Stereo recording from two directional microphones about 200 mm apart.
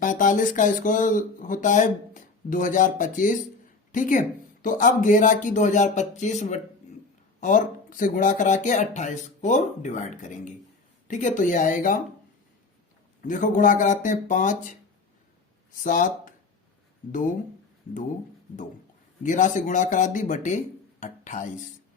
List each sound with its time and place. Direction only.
0.0 s speech: 40° left (ahead or behind)
13.2 s speech: 40° left (ahead or behind)
15.8 s speech: 40° left (ahead or behind)
19.2 s speech: 40° left (ahead or behind)